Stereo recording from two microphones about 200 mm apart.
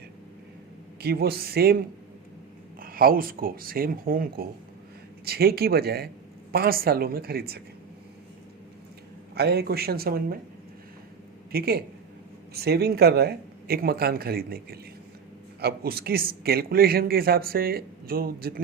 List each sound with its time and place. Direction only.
1.0 s speech: 50° right (ahead or behind)
2.8 s speech: 45° right (ahead or behind)
9.3 s speech: 55° right (ahead or behind)
11.5 s speech: 50° right (ahead or behind)